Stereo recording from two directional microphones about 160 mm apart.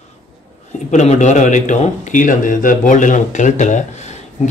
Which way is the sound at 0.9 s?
50° left (ahead or behind).